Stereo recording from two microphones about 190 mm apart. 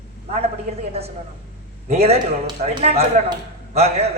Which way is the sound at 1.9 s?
35° right (ahead or behind).